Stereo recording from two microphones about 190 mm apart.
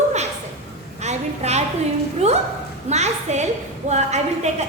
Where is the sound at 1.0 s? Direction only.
35° right (ahead or behind).